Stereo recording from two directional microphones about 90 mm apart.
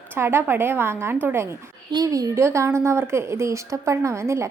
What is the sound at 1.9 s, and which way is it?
A woman's voice, 45° right (ahead or behind).